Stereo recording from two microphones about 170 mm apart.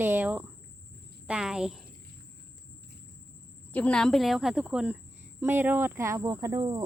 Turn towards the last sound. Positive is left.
turn(degrees=-25)  # may be behind; listen again after turning